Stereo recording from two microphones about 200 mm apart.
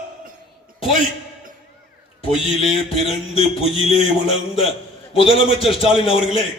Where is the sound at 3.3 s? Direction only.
30° left (ahead or behind).